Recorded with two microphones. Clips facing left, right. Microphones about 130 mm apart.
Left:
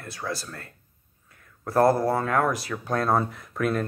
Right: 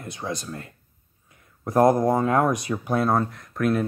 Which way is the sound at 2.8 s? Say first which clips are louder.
Right 1 dB; 5° right (ahead or behind).